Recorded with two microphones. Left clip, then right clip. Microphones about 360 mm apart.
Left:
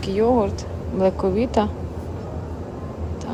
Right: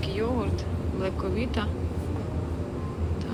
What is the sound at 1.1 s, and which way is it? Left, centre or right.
Speech, centre.